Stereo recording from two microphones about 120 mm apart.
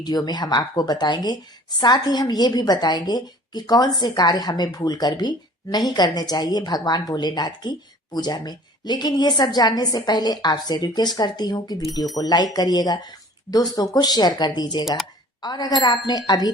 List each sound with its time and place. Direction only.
0.0 s a woman's voice: 35° left (ahead or behind)